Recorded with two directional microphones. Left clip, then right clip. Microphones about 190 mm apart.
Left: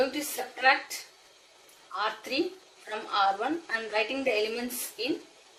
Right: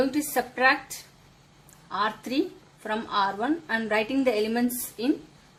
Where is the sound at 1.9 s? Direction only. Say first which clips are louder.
Right 3 dB; 50° right (ahead or behind).